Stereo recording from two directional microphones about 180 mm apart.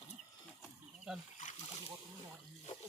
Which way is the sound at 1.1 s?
5° right (ahead or behind).